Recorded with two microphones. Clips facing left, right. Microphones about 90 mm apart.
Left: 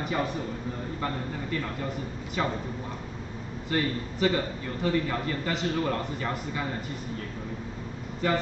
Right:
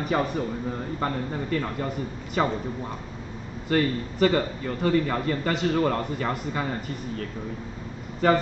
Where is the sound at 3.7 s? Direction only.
50° right (ahead or behind).